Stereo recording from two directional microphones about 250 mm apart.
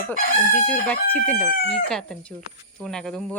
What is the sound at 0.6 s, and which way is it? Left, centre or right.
Speech, centre.